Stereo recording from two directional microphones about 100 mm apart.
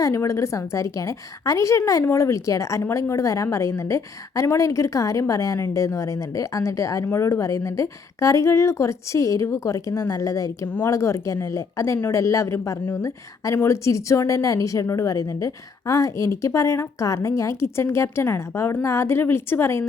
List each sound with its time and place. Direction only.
0.0 s a woman's voice: 30° left (ahead or behind)